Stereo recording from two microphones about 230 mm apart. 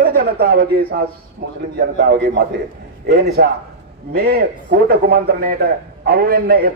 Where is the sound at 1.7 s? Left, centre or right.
Right.